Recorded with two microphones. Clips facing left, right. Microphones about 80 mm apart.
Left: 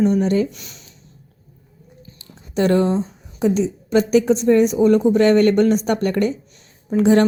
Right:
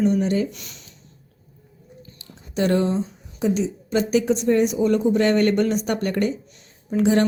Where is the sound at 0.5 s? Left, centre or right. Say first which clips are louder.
Left 1 dB; left.